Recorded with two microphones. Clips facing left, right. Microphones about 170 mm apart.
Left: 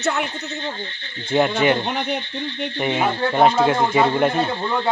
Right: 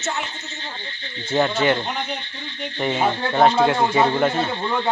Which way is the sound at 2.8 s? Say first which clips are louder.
Even; 10° left (ahead or behind).